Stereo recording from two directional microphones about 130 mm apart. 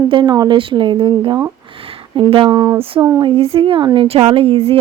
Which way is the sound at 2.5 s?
25° right (ahead or behind).